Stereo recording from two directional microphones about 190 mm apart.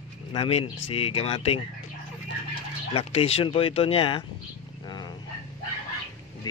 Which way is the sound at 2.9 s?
30° left (ahead or behind).